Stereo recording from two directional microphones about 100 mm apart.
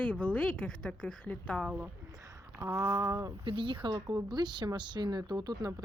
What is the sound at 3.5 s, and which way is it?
Speech, 55° right (ahead or behind).